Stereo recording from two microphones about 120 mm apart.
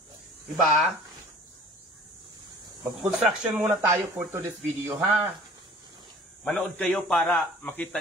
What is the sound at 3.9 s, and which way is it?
Speech, 20° right (ahead or behind).